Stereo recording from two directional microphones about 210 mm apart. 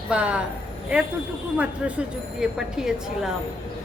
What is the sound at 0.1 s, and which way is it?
Speech, 5° right (ahead or behind).